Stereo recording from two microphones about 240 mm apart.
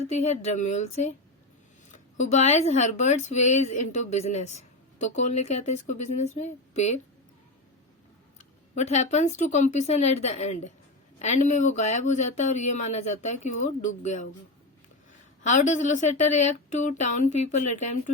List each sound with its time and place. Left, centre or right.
0.0 s speech: left
2.1 s speech: left
8.4 s speech: left
15.4 s speech: left